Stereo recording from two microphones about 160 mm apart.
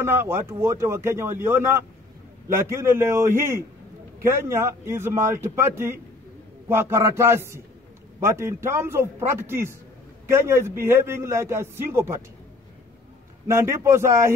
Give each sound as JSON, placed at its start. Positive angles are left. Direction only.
{"t": 0.0, "sound": "a man's voice", "side_deg": -15}
{"t": 13.5, "sound": "a man's voice", "side_deg": -20}